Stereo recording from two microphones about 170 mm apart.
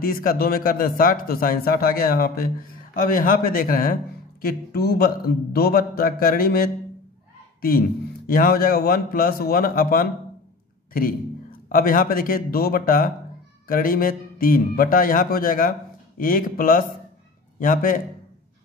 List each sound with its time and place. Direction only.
0.0 s a man's voice: 55° left (ahead or behind)
8.3 s a man's voice: 60° left (ahead or behind)